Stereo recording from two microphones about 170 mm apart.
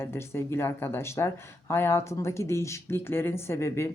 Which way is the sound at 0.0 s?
15° left (ahead or behind).